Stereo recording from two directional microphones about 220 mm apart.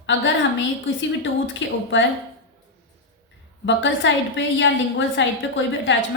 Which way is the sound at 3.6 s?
55° left (ahead or behind).